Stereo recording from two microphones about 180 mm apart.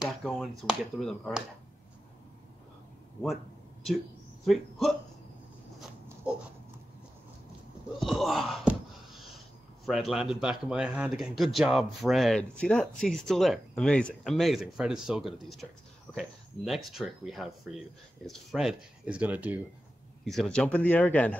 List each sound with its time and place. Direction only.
0.0 s speech: centre (ahead or behind)
4.5 s speech: centre (ahead or behind)
8.0 s wail: centre (ahead or behind)
9.8 s speech: centre (ahead or behind)
20.2 s speech: centre (ahead or behind)